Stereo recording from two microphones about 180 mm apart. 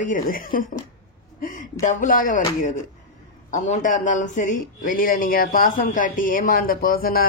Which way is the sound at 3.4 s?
40° left (ahead or behind).